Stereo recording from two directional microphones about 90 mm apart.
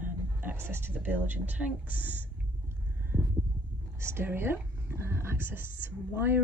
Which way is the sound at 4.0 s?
30° right (ahead or behind).